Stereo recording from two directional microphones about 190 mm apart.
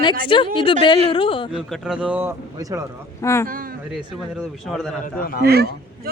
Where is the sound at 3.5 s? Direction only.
50° right (ahead or behind).